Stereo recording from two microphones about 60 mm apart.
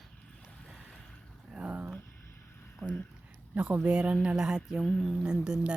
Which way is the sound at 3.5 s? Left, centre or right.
Right.